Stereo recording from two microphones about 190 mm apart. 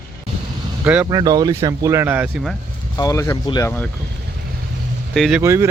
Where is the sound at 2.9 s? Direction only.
15° left (ahead or behind).